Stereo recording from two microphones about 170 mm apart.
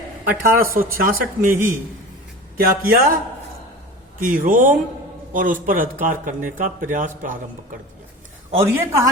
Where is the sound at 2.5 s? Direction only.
60° right (ahead or behind).